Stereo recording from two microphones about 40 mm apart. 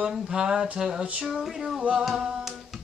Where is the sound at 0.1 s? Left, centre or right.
Centre.